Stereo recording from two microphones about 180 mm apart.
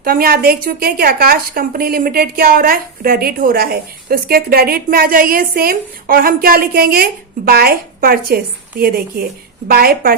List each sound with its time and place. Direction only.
0.0 s a woman's voice: 55° right (ahead or behind)